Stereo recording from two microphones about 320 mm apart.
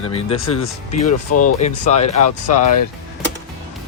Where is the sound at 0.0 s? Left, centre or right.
Centre.